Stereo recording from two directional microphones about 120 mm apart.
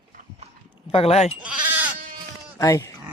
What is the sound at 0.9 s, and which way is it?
Speech, 55° left (ahead or behind).